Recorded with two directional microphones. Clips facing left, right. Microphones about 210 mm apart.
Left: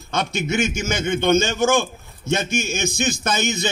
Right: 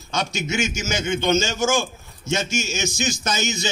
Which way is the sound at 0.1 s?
55° left (ahead or behind).